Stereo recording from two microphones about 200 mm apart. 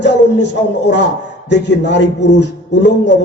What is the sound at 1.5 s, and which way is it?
A man's voice, 60° left (ahead or behind).